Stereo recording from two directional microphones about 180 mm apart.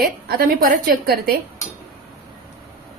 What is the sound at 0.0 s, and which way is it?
A woman's voice, 55° right (ahead or behind).